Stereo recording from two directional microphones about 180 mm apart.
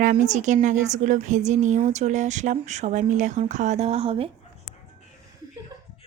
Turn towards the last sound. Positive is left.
turn(degrees=-35)  # may be behind; listen again after turning